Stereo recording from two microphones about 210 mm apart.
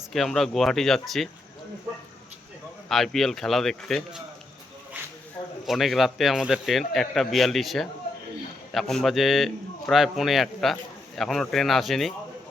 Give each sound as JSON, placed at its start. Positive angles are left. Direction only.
{"t": 0.1, "sound": "a man's voice", "side_deg": 0}
{"t": 2.9, "sound": "a man's voice", "side_deg": 0}
{"t": 5.6, "sound": "a man's voice", "side_deg": 0}